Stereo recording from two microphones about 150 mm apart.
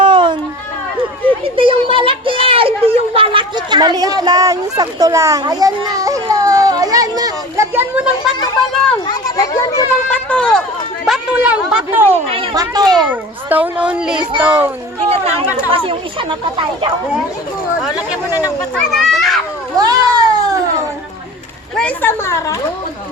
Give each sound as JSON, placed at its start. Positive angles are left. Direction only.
{"t": 0.0, "sound": "a sound", "side_deg": -35}
{"t": 1.3, "sound": "a child's voice", "side_deg": -35}
{"t": 9.0, "sound": "a child's voice", "side_deg": 25}
{"t": 10.1, "sound": "speech", "side_deg": 10}
{"t": 11.0, "sound": "a woman's voice", "side_deg": -5}
{"t": 12.5, "sound": "a child's voice", "side_deg": -25}
{"t": 13.1, "sound": "a child's voice", "side_deg": -10}
{"t": 15.1, "sound": "speech", "side_deg": -45}
{"t": 18.7, "sound": "children playing", "side_deg": 0}
{"t": 19.7, "sound": "a sound", "side_deg": -25}
{"t": 21.8, "sound": "a woman's voice", "side_deg": 10}